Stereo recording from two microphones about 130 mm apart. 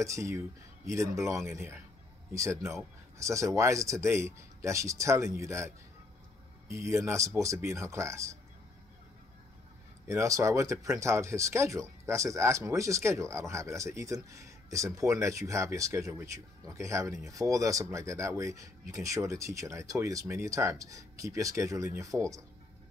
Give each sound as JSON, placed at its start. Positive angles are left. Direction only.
{"t": 0.0, "sound": "speech", "side_deg": -25}
{"t": 6.7, "sound": "speech", "side_deg": -20}
{"t": 10.0, "sound": "speech", "side_deg": -25}